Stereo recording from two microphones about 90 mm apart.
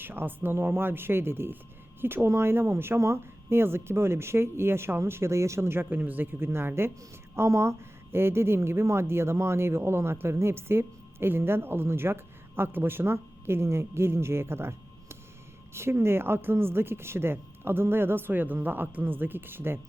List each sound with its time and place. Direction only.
0.0 s a woman's voice: 20° right (ahead or behind)